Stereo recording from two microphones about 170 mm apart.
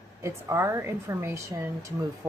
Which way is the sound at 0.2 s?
15° right (ahead or behind).